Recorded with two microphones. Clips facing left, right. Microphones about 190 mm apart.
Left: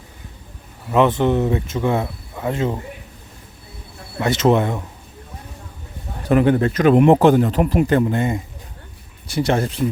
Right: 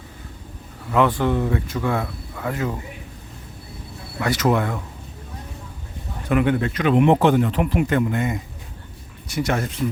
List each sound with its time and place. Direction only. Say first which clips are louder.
0.9 s speech: left 3 dB; 20° left (ahead or behind)
4.2 s speech: left 4 dB; 25° left (ahead or behind)
6.2 s speech: left 4 dB; 35° left (ahead or behind)